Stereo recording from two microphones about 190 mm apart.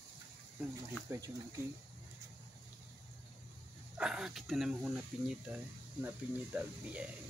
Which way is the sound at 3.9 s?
5° right (ahead or behind).